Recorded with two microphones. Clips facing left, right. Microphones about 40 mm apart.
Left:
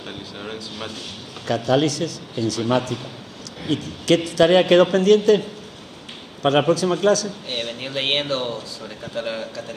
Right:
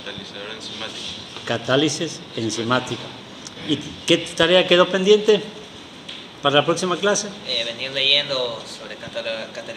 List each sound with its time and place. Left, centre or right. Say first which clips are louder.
1.4 s a man's voice: even; right
6.7 s a man's voice: left 2 dB; right